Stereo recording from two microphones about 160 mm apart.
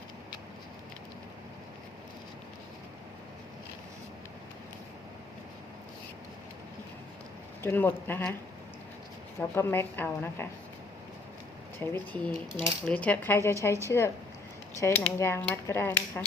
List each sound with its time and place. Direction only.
7.6 s speech: 15° left (ahead or behind)
9.4 s speech: 15° left (ahead or behind)
11.8 s speech: 10° left (ahead or behind)